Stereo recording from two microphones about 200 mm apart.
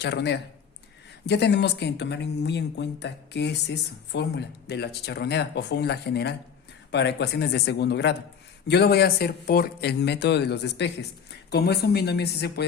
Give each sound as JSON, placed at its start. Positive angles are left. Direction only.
{"t": 0.0, "sound": "speech", "side_deg": 55}